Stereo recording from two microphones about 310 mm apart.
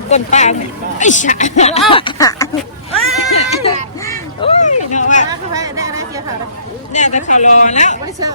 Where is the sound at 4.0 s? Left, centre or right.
Centre.